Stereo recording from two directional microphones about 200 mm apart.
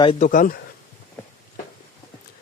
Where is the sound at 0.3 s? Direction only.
40° left (ahead or behind).